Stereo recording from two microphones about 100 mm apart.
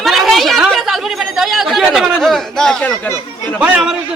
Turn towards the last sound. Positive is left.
turn(degrees=-10)  # may be behind; listen again after turning